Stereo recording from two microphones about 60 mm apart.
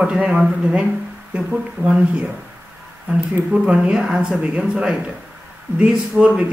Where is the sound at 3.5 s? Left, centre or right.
Centre.